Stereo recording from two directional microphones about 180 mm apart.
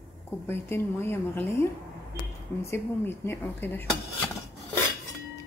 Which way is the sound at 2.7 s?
15° left (ahead or behind).